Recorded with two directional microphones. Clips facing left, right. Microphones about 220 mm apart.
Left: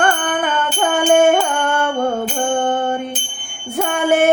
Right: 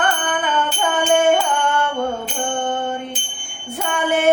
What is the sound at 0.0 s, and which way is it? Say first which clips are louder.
Music: left 3 dB; 45° left (ahead or behind).